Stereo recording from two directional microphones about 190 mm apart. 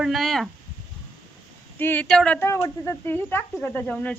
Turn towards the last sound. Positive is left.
turn(degrees=5)  # may be behind; listen again after turning